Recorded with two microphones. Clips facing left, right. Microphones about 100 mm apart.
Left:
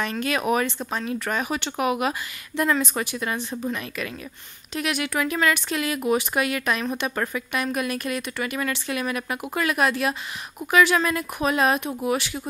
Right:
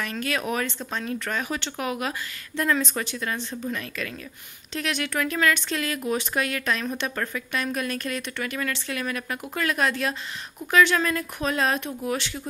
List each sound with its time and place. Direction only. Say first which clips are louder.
0.0 s speech: left 3 dB; 20° left (ahead or behind)